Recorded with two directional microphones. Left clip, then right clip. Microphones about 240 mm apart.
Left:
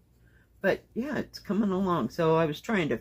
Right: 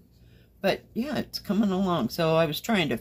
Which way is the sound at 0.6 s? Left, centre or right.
Centre.